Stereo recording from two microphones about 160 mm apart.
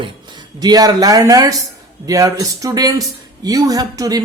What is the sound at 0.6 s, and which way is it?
A woman's voice, 25° right (ahead or behind).